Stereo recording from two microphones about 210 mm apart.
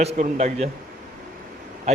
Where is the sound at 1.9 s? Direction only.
30° right (ahead or behind).